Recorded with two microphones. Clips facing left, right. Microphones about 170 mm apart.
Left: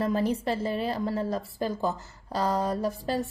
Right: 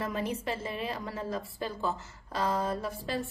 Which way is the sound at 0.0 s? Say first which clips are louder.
Left 7 dB; 35° left (ahead or behind).